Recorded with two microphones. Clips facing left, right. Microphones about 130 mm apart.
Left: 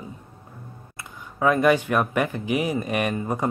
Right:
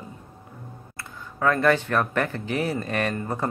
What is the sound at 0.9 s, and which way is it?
Speech, 15° left (ahead or behind).